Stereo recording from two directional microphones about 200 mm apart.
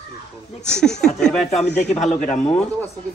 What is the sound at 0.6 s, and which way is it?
Speech, 5° left (ahead or behind).